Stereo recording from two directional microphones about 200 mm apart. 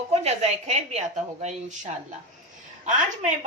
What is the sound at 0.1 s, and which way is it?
A woman's voice, 30° right (ahead or behind).